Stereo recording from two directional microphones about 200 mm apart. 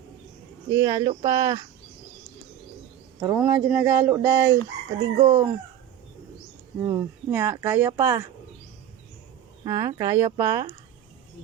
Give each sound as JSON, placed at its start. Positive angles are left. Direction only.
{"t": 0.7, "sound": "speech", "side_deg": -15}
{"t": 3.2, "sound": "speech", "side_deg": -10}
{"t": 6.7, "sound": "speech", "side_deg": -15}
{"t": 9.6, "sound": "speech", "side_deg": -15}